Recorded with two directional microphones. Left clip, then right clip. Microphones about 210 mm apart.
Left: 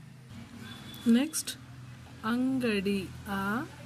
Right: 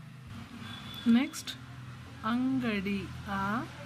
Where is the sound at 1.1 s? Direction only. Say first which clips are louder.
Left 1 dB; 30° left (ahead or behind).